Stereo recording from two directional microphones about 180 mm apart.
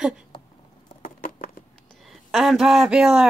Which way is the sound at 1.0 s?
50° left (ahead or behind).